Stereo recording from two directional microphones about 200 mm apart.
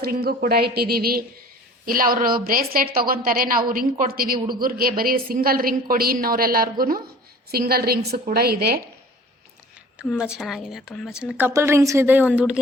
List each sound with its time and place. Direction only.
0.0 s a woman's voice: 50° right (ahead or behind)
10.1 s a woman's voice: 5° right (ahead or behind)